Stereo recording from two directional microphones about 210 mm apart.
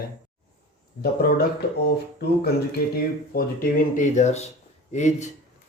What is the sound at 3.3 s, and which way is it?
Speech, 40° left (ahead or behind).